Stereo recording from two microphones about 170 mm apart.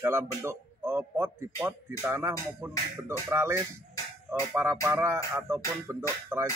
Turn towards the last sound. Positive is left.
turn(degrees=-15)  # may be behind; listen again after turning